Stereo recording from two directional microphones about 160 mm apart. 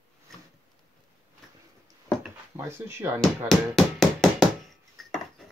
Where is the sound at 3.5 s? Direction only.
Centre (ahead or behind).